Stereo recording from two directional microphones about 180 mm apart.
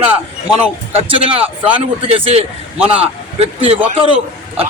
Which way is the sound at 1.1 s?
30° right (ahead or behind).